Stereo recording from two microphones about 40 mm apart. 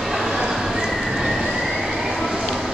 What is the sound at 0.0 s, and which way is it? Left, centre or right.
Horse, centre.